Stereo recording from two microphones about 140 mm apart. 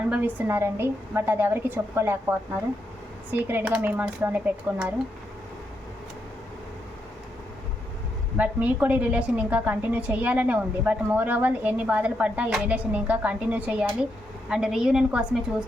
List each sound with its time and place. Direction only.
0.1 s a woman's voice: 15° right (ahead or behind)
3.3 s a woman's voice: 15° right (ahead or behind)
8.4 s a woman's voice: 10° right (ahead or behind)